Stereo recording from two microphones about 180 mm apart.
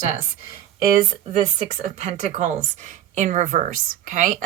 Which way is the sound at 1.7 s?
40° right (ahead or behind).